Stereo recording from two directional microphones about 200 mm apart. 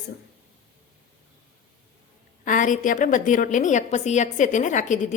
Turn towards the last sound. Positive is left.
turn(degrees=40)  # may be behind; listen again after turning